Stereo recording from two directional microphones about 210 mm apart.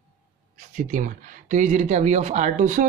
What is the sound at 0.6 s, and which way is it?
Speech, 40° right (ahead or behind).